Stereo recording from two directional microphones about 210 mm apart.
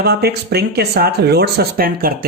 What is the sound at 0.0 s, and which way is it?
Speech, 50° right (ahead or behind).